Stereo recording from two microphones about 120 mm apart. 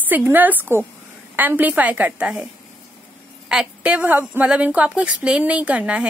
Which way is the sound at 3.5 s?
10° right (ahead or behind).